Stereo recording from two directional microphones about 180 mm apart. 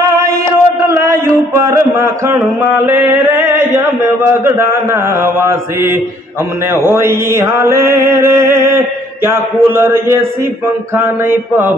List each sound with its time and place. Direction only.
0.2 s a sound: 15° right (ahead or behind)
4.3 s mantra: 15° right (ahead or behind)
8.6 s a man's voice: 15° right (ahead or behind)
11.0 s mantra: 10° right (ahead or behind)